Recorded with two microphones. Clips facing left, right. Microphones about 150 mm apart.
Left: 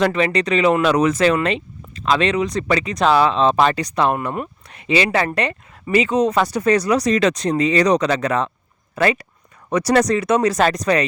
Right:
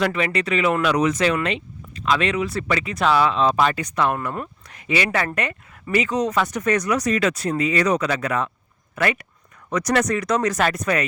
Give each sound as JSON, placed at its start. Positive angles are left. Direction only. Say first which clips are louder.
{"t": 0.0, "sound": "speech", "louder": "left 4 dB", "side_deg": 35}
{"t": 0.8, "sound": "speech", "louder": "left 4 dB", "side_deg": 40}
{"t": 9.0, "sound": "speech", "louder": "left 4 dB", "side_deg": 30}